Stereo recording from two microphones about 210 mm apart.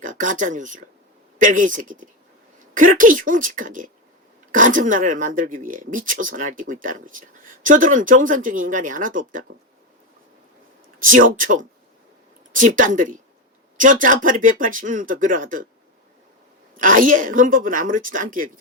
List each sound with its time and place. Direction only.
0.0 s speech: 40° right (ahead or behind)
11.1 s speech: 40° right (ahead or behind)
16.7 s speech: 40° right (ahead or behind)